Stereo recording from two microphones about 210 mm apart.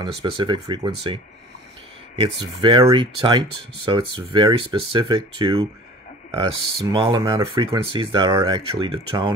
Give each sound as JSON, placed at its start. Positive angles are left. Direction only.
{"t": 0.4, "sound": "speech", "side_deg": -20}